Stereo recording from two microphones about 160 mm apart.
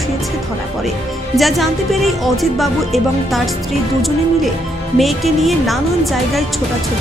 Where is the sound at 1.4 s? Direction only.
Centre (ahead or behind).